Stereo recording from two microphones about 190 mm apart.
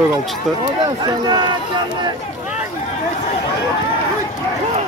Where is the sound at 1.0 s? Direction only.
20° right (ahead or behind).